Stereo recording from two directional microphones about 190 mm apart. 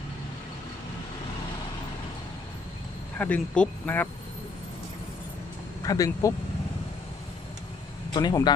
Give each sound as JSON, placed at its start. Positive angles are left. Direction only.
{"t": 3.2, "sound": "speech", "side_deg": 10}
{"t": 5.8, "sound": "speech", "side_deg": 20}
{"t": 8.1, "sound": "speech", "side_deg": 20}